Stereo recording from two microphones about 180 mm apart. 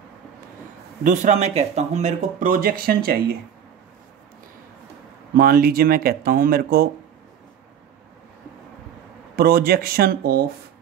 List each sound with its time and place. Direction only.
1.0 s speech: 45° right (ahead or behind)
5.3 s speech: 55° right (ahead or behind)
9.4 s speech: 55° right (ahead or behind)